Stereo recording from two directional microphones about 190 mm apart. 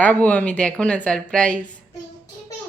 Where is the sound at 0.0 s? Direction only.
10° left (ahead or behind).